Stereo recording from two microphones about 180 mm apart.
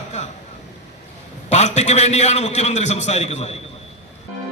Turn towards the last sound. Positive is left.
turn(degrees=40)  # may be behind; listen again after turning